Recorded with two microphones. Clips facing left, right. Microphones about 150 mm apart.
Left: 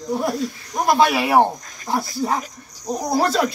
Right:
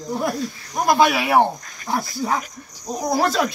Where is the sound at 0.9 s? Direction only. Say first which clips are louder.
Even; centre (ahead or behind).